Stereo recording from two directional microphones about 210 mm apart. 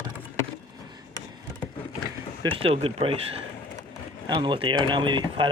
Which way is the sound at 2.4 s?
25° right (ahead or behind).